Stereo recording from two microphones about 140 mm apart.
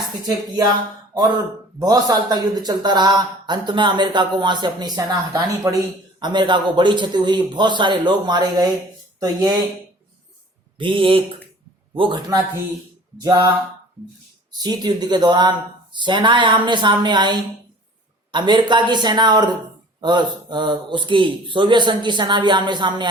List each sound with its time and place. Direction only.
0.3 s speech: 30° right (ahead or behind)
1.8 s speech: 25° right (ahead or behind)
10.8 s speech: 35° right (ahead or behind)
14.6 s speech: 30° right (ahead or behind)